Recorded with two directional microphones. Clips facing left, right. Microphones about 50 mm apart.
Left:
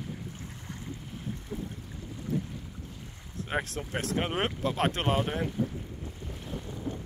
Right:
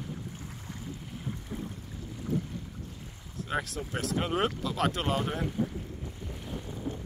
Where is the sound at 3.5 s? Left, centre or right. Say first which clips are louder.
Left 1 dB; left.